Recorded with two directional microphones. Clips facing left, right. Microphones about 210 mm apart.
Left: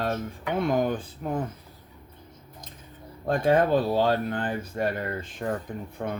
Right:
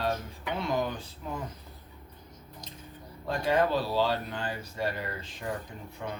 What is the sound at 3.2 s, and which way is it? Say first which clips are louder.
Speech: left 5 dB; 55° left (ahead or behind).